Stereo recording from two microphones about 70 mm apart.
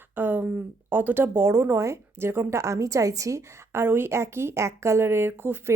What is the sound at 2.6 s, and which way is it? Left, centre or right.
A woman's voice, right.